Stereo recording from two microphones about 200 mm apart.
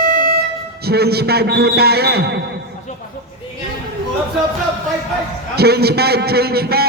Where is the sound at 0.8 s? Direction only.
50° right (ahead or behind).